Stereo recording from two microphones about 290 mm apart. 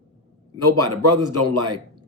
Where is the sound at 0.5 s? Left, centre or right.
Right.